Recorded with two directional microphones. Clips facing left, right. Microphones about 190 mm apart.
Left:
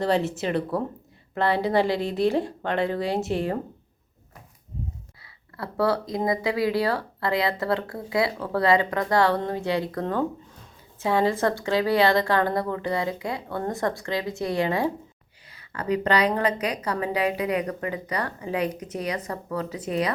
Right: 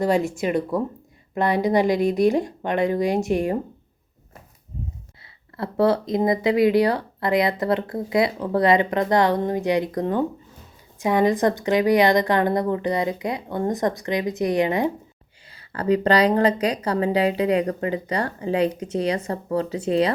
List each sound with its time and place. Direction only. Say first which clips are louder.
0.0 s a woman's voice: right 3 dB; 15° right (ahead or behind)
5.2 s a woman's voice: right 5 dB; 20° right (ahead or behind)
15.5 s speech: right 5 dB; 30° right (ahead or behind)